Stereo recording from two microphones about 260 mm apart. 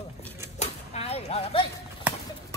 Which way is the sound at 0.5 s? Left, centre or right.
Left.